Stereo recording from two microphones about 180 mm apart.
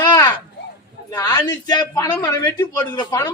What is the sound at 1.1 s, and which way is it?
A man's voice, 20° left (ahead or behind).